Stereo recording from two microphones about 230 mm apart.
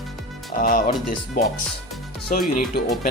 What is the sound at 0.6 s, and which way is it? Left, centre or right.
Speech, left.